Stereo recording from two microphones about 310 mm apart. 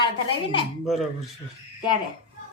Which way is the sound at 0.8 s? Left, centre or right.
Centre.